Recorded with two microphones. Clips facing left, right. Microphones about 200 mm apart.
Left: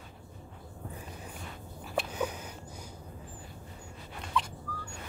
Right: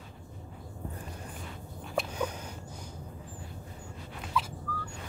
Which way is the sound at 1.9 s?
5° left (ahead or behind).